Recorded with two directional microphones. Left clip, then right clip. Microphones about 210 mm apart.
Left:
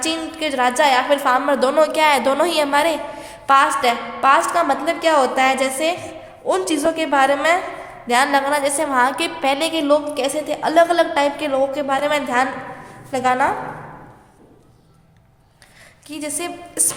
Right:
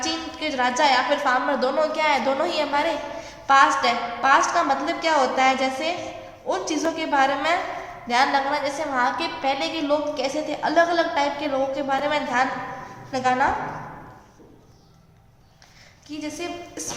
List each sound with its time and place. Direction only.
0.0 s a sound: 45° left (ahead or behind)
0.8 s a woman's voice: 40° left (ahead or behind); by 2.9 s 55° left (ahead or behind)
3.4 s a woman's voice: 40° left (ahead or behind)
16.0 s a woman's voice: 55° left (ahead or behind)